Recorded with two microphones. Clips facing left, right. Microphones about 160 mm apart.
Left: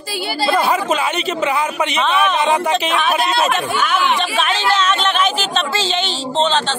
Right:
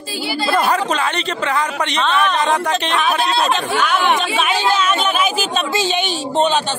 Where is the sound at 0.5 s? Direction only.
Centre (ahead or behind).